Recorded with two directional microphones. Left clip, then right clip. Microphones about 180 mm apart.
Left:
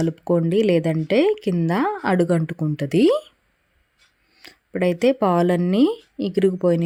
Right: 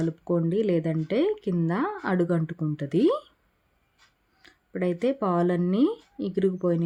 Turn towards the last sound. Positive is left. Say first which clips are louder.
# left 7 dB
turn(degrees=20)  # may be behind; listen again after turning